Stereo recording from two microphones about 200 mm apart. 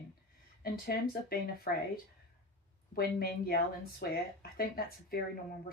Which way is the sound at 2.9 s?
50° left (ahead or behind).